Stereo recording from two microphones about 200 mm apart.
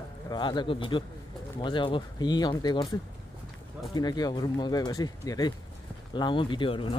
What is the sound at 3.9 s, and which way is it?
Speech, 20° left (ahead or behind).